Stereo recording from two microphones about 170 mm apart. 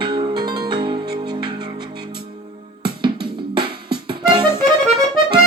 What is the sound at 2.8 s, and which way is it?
Music, 30° right (ahead or behind).